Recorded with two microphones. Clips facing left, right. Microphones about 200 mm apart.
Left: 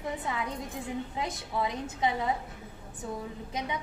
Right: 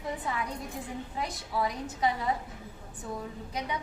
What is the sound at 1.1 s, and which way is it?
Speech, 25° left (ahead or behind).